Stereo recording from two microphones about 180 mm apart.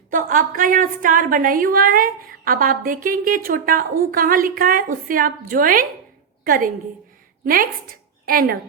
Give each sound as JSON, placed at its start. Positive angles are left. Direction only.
{"t": 0.1, "sound": "a woman's voice", "side_deg": -50}